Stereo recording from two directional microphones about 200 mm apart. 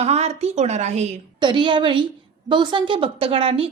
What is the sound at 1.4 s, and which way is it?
A woman's voice, 25° right (ahead or behind).